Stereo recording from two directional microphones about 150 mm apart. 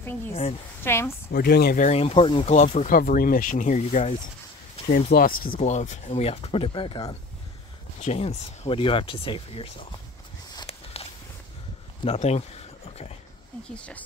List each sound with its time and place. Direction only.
0.3 s speech: 45° left (ahead or behind)
0.8 s speech: 15° left (ahead or behind)
1.3 s speech: 90° left
1.8 s speech: 45° left (ahead or behind)
2.5 s speech: 55° left (ahead or behind)
4.8 s speech: 70° left (ahead or behind)
5.7 s speech: 50° left (ahead or behind); by 7.2 s 35° left (ahead or behind)
8.0 s speech: 45° left (ahead or behind)
10.7 s walk: 40° left (ahead or behind)
12.2 s a sound: 45° left (ahead or behind)
13.7 s speech: 10° left (ahead or behind)